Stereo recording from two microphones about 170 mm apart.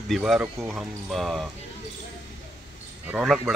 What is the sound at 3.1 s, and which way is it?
Speech, 5° right (ahead or behind).